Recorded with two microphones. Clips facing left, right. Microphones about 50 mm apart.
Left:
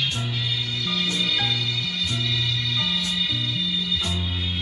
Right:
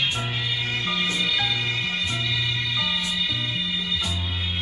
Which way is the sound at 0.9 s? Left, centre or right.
Right.